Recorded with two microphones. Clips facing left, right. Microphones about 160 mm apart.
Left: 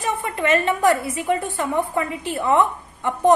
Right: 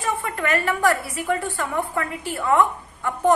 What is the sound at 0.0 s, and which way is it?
A woman's voice, 20° left (ahead or behind).